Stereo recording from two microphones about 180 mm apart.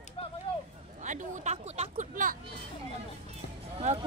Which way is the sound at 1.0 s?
40° right (ahead or behind).